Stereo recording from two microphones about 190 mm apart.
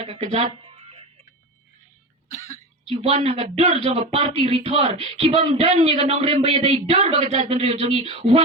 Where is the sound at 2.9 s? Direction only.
35° right (ahead or behind).